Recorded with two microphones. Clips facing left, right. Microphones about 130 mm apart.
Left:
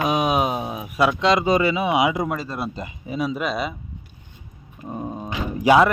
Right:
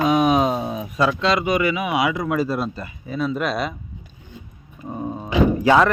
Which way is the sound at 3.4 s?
Centre (ahead or behind).